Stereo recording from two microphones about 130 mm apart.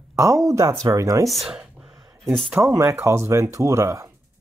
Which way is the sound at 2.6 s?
25° right (ahead or behind).